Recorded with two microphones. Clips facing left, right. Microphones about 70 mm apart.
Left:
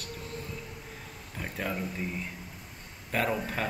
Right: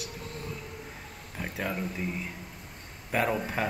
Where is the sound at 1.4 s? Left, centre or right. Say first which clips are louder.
Right 1 dB; centre.